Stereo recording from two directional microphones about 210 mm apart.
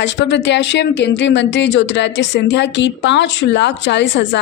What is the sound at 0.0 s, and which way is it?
Speech, 55° left (ahead or behind).